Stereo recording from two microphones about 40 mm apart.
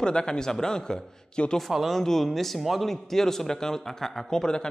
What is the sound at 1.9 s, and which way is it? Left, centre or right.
A man's voice, centre.